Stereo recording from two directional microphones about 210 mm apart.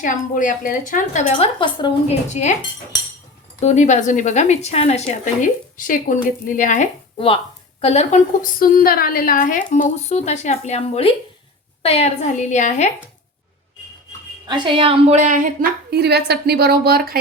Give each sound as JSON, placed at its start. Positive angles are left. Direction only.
{"t": 0.0, "sound": "a woman's voice", "side_deg": 40}
{"t": 1.5, "sound": "a woman's voice", "side_deg": 25}
{"t": 3.6, "sound": "a woman's voice", "side_deg": 35}
{"t": 14.4, "sound": "a woman's voice", "side_deg": -20}